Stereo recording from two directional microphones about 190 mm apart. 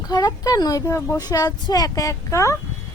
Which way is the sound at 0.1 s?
20° left (ahead or behind).